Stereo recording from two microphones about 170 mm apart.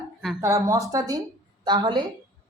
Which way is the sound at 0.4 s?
20° right (ahead or behind).